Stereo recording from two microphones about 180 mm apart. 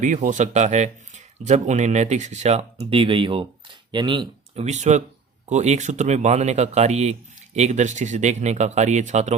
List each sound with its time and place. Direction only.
0.0 s speech: 45° right (ahead or behind); by 4.6 s 25° right (ahead or behind)
4.6 s speech: 40° right (ahead or behind)